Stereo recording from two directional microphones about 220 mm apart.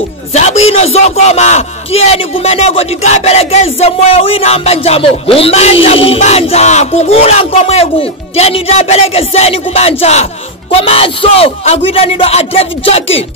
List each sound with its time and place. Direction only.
0.3 s speech: 30° left (ahead or behind)